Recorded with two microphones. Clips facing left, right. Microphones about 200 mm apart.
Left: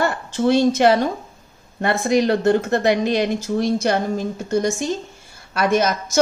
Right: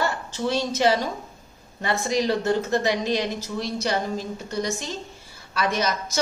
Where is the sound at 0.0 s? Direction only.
55° left (ahead or behind).